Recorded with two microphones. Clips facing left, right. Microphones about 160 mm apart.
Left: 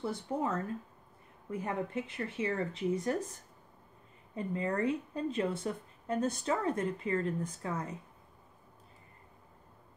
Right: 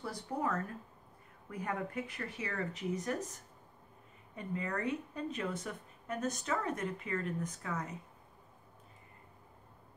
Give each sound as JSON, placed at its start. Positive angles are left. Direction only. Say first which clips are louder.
{"t": 0.0, "sound": "speech", "louder": "left 3 dB", "side_deg": 25}
{"t": 4.4, "sound": "speech", "louder": "left 5 dB", "side_deg": 30}